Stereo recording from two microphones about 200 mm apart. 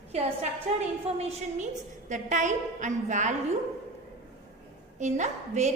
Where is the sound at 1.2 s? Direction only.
30° right (ahead or behind).